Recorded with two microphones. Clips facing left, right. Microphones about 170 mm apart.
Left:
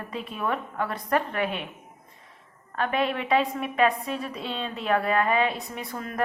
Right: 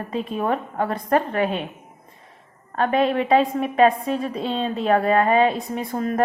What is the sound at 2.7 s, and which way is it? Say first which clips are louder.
A woman's voice: right 7 dB; 35° right (ahead or behind).